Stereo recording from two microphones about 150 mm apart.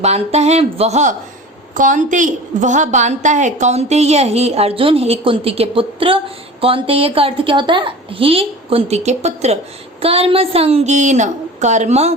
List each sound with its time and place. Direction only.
0.0 s a woman's voice: 45° right (ahead or behind)
1.7 s a woman's voice: 60° right (ahead or behind)